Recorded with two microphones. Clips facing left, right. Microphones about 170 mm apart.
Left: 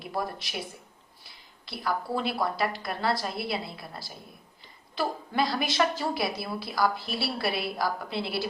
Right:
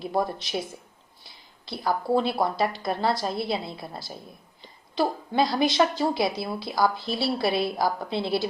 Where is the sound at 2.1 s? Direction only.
30° right (ahead or behind).